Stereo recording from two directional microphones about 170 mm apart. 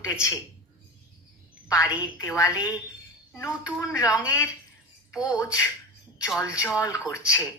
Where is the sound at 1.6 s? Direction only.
15° left (ahead or behind).